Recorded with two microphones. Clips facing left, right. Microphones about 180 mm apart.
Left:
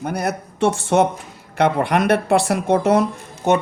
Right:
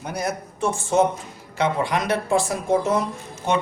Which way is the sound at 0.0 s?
60° left (ahead or behind).